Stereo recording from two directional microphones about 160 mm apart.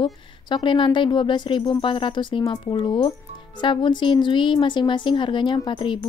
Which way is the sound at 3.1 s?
30° left (ahead or behind).